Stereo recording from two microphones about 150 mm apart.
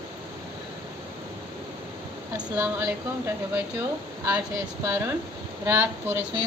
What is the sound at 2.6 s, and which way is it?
Speech, 15° right (ahead or behind).